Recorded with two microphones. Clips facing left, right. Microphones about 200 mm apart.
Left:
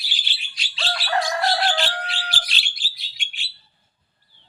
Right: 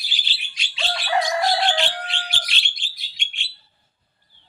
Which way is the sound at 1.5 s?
Centre (ahead or behind).